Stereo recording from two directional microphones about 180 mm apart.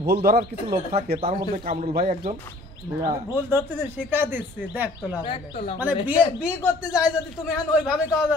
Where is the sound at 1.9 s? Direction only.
50° right (ahead or behind).